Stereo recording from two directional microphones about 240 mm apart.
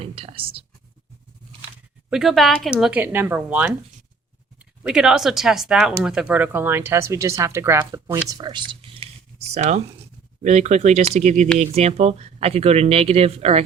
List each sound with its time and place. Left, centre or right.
0.0 s speech: right
2.0 s speech: centre
4.8 s speech: centre; by 13.7 s right